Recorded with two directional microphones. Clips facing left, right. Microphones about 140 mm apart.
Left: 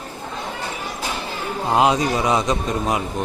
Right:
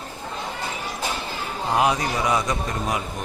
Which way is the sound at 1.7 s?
20° left (ahead or behind).